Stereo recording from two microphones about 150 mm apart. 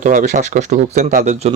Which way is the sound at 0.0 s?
60° right (ahead or behind).